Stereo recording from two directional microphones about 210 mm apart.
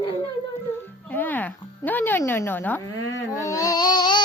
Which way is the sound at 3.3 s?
15° left (ahead or behind).